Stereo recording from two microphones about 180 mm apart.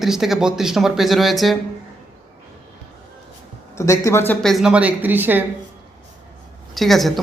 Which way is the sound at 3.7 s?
15° left (ahead or behind).